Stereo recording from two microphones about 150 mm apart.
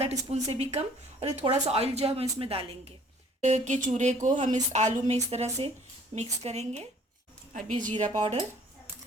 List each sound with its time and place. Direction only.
0.0 s speech: 45° right (ahead or behind)
3.4 s speech: 50° right (ahead or behind)
7.5 s speech: 60° right (ahead or behind)